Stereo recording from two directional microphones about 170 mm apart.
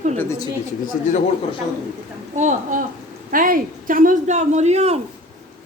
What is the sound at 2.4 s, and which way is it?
Speech, 45° right (ahead or behind).